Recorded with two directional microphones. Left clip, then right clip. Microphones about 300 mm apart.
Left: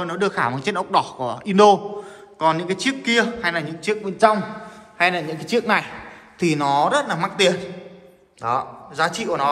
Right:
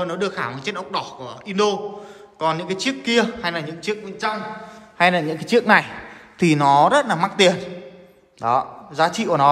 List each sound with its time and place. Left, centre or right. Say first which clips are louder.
0.0 s a man's voice: left 2 dB; centre
4.9 s a man's voice: right 2 dB; right